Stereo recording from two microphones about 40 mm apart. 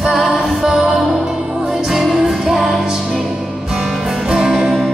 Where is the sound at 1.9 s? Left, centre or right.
Centre.